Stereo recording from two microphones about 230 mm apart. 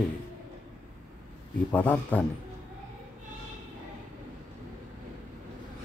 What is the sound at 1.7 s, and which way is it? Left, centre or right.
Speech, centre.